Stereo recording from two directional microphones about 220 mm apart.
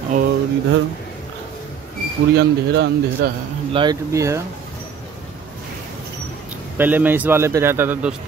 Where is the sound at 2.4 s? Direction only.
50° right (ahead or behind).